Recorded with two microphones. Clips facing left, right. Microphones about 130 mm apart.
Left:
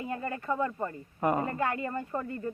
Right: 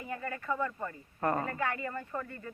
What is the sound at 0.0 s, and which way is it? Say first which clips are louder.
Speech: left 4 dB; 25° left (ahead or behind).